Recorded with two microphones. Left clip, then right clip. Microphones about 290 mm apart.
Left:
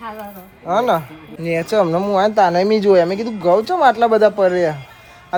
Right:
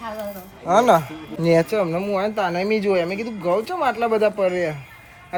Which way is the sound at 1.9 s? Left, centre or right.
Centre.